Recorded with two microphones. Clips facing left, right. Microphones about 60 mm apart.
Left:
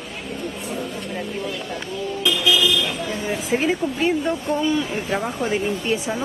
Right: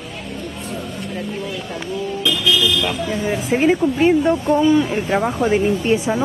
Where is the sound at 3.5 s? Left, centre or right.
Centre.